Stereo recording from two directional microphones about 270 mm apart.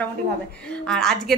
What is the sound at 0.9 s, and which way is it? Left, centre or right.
Speech, centre.